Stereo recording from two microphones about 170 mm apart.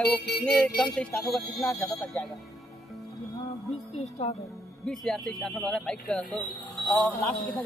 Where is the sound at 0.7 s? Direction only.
5° left (ahead or behind).